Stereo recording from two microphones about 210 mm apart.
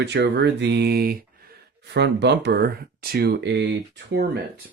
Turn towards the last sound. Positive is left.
turn(degrees=-55)  # may be behind; listen again after turning